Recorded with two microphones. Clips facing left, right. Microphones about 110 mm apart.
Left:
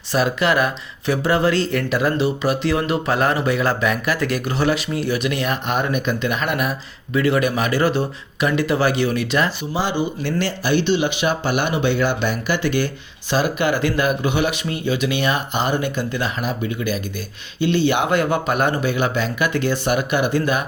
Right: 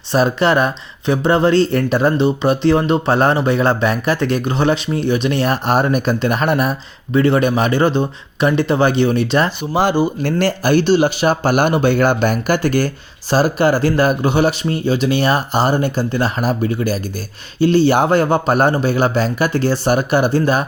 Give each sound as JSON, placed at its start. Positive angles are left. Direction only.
{"t": 0.1, "sound": "speech", "side_deg": -30}
{"t": 9.7, "sound": "speech", "side_deg": -50}